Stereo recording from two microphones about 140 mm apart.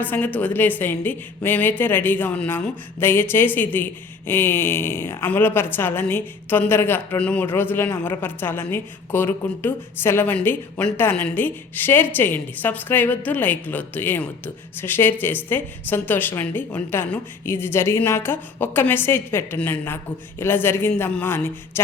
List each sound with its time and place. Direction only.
0.0 s a woman's voice: 10° left (ahead or behind)